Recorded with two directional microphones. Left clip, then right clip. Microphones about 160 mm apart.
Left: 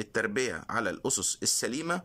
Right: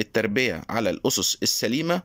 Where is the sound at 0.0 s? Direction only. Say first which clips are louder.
Right 7 dB; 10° right (ahead or behind).